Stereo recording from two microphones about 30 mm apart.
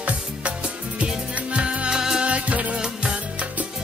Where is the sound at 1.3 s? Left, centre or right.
Right.